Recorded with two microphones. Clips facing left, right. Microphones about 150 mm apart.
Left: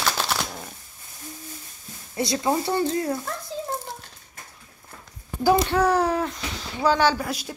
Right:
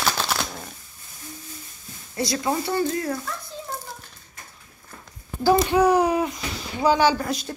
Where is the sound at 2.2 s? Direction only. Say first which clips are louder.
Left 1 dB; 20° left (ahead or behind).